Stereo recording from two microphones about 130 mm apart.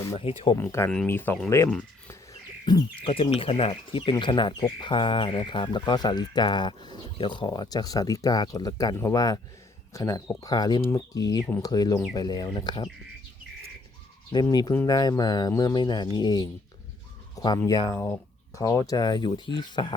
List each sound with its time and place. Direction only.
0.1 s speech: 45° left (ahead or behind)
0.5 s speech: 20° left (ahead or behind)
3.1 s speech: 45° left (ahead or behind)
14.3 s speech: 30° left (ahead or behind)